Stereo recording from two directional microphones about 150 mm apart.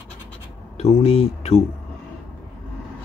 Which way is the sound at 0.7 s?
45° left (ahead or behind).